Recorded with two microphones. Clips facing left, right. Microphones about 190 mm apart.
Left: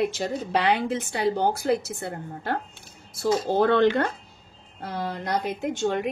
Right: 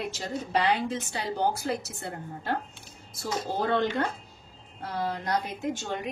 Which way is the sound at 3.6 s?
65° left (ahead or behind).